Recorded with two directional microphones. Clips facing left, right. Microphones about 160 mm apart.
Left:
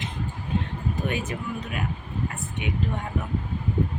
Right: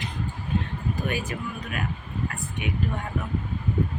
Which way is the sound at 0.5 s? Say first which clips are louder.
Even; 20° left (ahead or behind).